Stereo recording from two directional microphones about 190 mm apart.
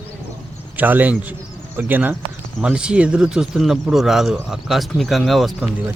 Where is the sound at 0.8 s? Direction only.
10° right (ahead or behind).